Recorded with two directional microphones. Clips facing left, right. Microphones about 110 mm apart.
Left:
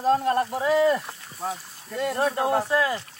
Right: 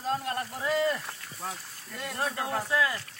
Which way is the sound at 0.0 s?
45° left (ahead or behind).